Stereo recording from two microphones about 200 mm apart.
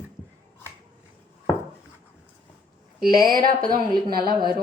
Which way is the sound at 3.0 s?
45° right (ahead or behind).